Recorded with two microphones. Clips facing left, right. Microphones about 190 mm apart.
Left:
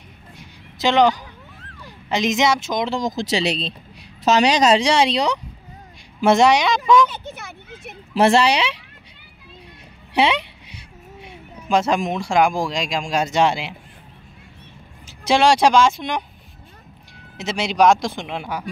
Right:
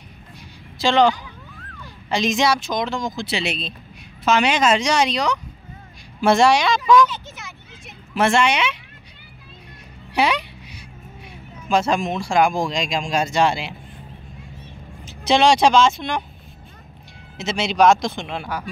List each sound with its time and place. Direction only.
0.4 s a sound: 20° left (ahead or behind)
2.0 s speech: 20° left (ahead or behind)
3.0 s speech: 40° left (ahead or behind); by 6.8 s 20° left (ahead or behind)
7.1 s a sound: 55° left (ahead or behind)
8.1 s speech: 35° left (ahead or behind)
10.1 s a sound: 25° left (ahead or behind)
11.6 s speech: 15° left (ahead or behind)
15.0 s speech: 10° left (ahead or behind)
17.4 s speech: 10° left (ahead or behind)